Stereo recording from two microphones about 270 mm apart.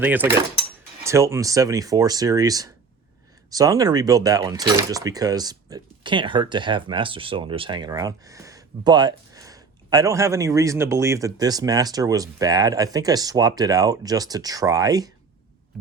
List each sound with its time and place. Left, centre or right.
0.0 s speech: centre